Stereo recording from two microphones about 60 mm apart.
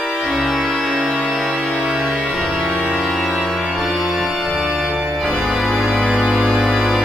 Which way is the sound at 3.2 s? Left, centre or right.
Centre.